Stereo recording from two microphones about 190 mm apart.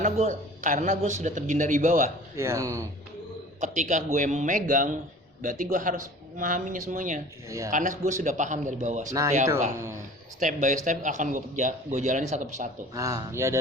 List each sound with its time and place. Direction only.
0.0 s speech: 40° right (ahead or behind)
2.3 s speech: 15° right (ahead or behind)
3.6 s speech: 40° right (ahead or behind)
7.4 s speech: 15° right (ahead or behind)
7.7 s speech: 40° right (ahead or behind)
9.5 s speech: 15° right (ahead or behind)
10.4 s speech: 40° right (ahead or behind)
12.9 s speech: 20° right (ahead or behind)